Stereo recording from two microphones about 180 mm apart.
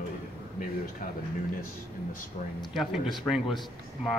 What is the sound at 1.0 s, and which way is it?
Speech, 50° left (ahead or behind).